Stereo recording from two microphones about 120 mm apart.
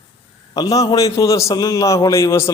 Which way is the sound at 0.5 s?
30° left (ahead or behind).